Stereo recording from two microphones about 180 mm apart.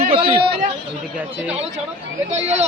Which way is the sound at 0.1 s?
30° right (ahead or behind).